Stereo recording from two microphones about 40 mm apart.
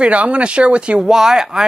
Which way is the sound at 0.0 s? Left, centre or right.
Right.